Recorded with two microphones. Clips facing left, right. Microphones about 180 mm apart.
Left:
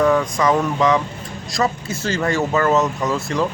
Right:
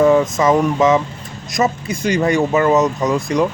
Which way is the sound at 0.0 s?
25° right (ahead or behind).